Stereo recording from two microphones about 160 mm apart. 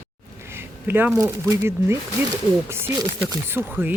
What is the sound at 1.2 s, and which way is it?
Speech, 15° right (ahead or behind).